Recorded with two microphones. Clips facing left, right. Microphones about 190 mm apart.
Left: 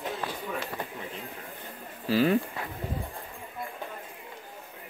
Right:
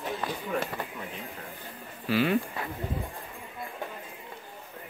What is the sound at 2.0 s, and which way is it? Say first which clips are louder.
Speech: left 2 dB; 40° left (ahead or behind).